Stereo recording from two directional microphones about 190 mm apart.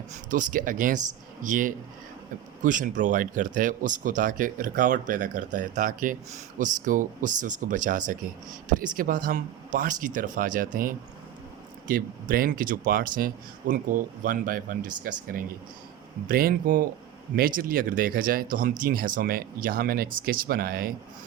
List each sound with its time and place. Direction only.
0.1 s speech: 45° right (ahead or behind)
11.9 s speech: 50° right (ahead or behind)
16.3 s speech: 50° right (ahead or behind)